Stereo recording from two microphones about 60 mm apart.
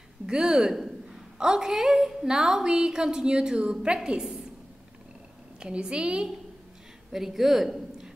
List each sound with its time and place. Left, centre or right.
0.3 s a woman's voice: centre
5.6 s a woman's voice: centre